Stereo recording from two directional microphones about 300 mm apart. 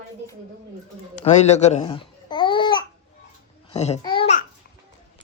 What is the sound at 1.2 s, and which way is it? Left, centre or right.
Babbling, left.